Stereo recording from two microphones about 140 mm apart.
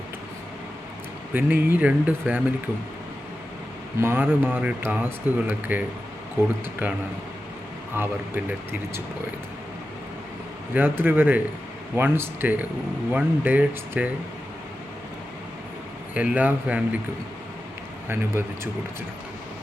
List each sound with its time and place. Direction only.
1.3 s speech: 15° right (ahead or behind)
4.0 s speech: 15° right (ahead or behind)
10.8 s speech: 15° right (ahead or behind)
16.1 s speech: 10° right (ahead or behind)
18.1 s speech: 15° right (ahead or behind)